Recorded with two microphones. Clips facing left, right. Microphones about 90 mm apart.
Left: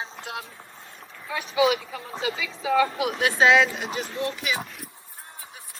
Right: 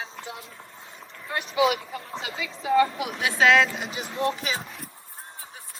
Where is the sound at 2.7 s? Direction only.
90° left.